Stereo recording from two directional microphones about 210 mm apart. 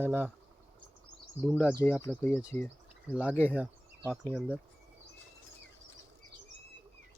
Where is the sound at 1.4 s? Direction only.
5° left (ahead or behind).